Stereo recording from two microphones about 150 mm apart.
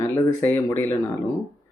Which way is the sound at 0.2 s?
15° left (ahead or behind).